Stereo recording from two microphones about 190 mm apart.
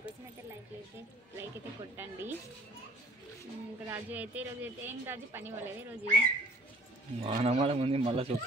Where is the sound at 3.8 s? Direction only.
10° right (ahead or behind).